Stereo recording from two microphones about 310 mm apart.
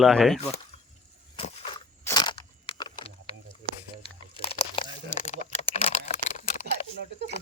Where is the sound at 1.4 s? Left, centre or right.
Centre.